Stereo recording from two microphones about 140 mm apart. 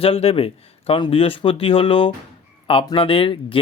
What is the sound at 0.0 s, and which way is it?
Speech, 45° left (ahead or behind).